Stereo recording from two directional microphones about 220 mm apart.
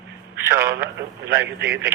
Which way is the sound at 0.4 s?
10° right (ahead or behind).